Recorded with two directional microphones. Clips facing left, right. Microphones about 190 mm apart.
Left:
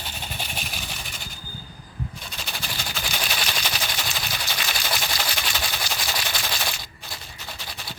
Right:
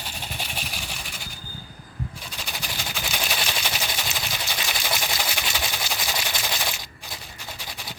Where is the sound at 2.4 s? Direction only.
10° right (ahead or behind).